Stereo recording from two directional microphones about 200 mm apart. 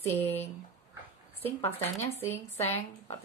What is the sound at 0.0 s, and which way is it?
Speech, 10° left (ahead or behind).